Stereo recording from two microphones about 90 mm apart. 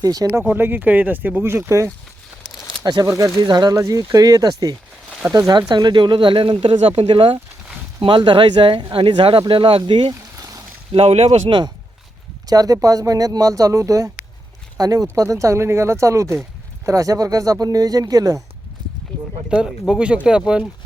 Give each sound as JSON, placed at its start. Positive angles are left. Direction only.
{"t": 0.0, "sound": "speech", "side_deg": -45}
{"t": 0.3, "sound": "speech", "side_deg": -25}
{"t": 2.8, "sound": "speech", "side_deg": -45}
{"t": 3.1, "sound": "speech", "side_deg": -35}
{"t": 3.4, "sound": "speech", "side_deg": -50}
{"t": 8.0, "sound": "speech", "side_deg": -65}
{"t": 10.3, "sound": "a sound", "side_deg": -40}
{"t": 10.9, "sound": "speech", "side_deg": -90}
{"t": 12.5, "sound": "speech", "side_deg": -45}
{"t": 19.1, "sound": "speech", "side_deg": 10}
{"t": 19.5, "sound": "speech", "side_deg": -10}